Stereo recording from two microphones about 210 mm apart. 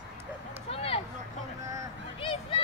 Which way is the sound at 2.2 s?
25° left (ahead or behind).